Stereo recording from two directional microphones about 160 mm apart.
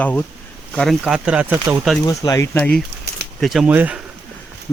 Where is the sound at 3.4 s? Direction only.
Centre (ahead or behind).